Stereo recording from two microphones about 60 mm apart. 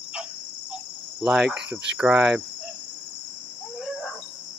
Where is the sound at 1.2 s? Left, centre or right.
Centre.